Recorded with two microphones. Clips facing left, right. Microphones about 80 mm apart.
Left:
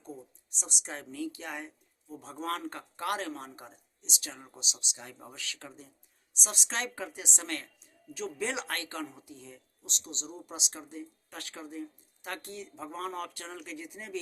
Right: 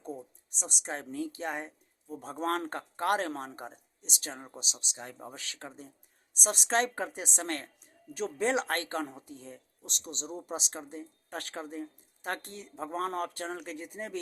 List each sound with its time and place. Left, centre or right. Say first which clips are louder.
0.5 s speech: right 4 dB; right